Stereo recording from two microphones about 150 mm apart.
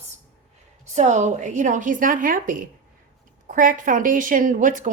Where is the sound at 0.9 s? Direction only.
50° right (ahead or behind).